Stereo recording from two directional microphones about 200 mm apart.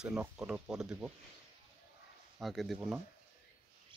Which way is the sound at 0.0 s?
5° right (ahead or behind).